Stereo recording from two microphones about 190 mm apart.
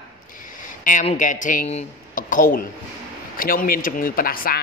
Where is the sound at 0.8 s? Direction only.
40° left (ahead or behind).